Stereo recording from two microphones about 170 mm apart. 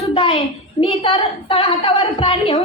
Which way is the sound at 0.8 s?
30° left (ahead or behind).